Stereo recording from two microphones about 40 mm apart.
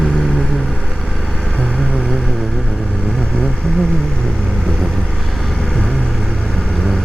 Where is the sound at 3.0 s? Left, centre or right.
Left.